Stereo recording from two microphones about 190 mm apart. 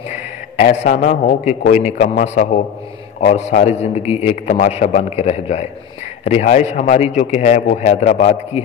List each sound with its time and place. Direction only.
0.6 s a man's voice: 40° left (ahead or behind)